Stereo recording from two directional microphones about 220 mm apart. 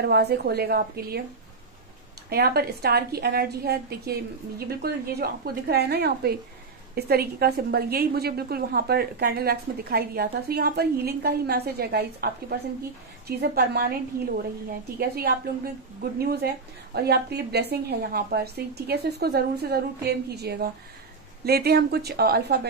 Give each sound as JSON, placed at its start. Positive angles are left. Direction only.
{"t": 0.0, "sound": "a woman's voice", "side_deg": -50}
{"t": 2.2, "sound": "a woman's voice", "side_deg": -45}